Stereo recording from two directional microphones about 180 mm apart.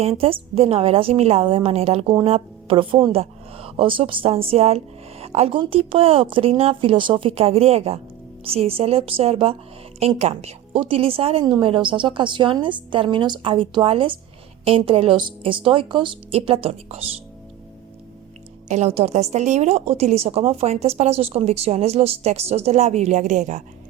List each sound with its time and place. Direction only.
0.0 s a woman's voice: 30° right (ahead or behind)
18.7 s a woman's voice: 35° right (ahead or behind)